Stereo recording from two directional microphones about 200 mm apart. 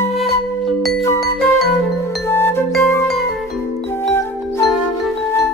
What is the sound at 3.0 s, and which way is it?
Music, centre (ahead or behind).